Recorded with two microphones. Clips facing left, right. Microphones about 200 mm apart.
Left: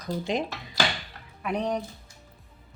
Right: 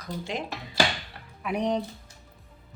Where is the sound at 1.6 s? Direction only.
20° right (ahead or behind).